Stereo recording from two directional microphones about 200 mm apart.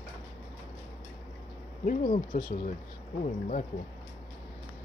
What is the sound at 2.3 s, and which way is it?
Speech, 45° left (ahead or behind).